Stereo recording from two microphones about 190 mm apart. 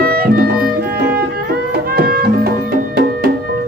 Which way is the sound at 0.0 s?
50° right (ahead or behind).